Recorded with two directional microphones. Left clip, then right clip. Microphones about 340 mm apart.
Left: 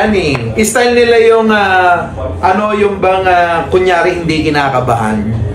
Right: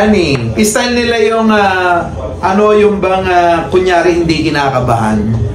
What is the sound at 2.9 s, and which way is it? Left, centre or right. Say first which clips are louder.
A man's voice: left 1 dB; centre.